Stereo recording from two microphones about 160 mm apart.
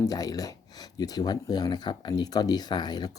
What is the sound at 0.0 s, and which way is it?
Speech, 25° left (ahead or behind).